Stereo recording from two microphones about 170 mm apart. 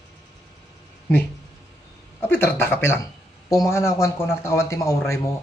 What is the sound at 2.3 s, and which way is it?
A man's voice, 15° left (ahead or behind).